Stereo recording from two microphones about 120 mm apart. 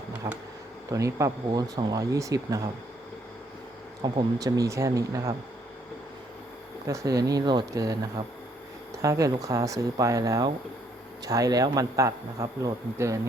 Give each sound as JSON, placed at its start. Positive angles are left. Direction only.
{"t": 0.2, "sound": "speech", "side_deg": -30}
{"t": 4.0, "sound": "speech", "side_deg": -30}
{"t": 6.8, "sound": "speech", "side_deg": -30}
{"t": 9.0, "sound": "speech", "side_deg": -25}